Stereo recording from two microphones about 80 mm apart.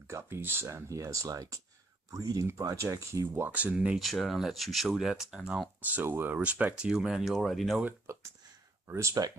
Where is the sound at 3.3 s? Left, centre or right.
Centre.